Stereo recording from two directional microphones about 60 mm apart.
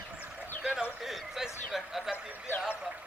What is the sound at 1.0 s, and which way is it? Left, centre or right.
Speech, centre.